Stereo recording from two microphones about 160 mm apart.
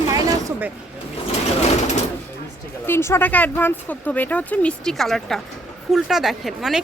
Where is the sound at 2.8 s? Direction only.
15° left (ahead or behind); by 6.8 s centre (ahead or behind).